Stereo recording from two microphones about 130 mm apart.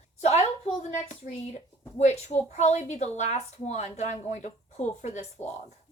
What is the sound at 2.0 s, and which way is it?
Speech, 60° left (ahead or behind).